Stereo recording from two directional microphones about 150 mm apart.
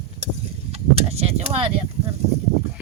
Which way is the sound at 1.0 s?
45° right (ahead or behind).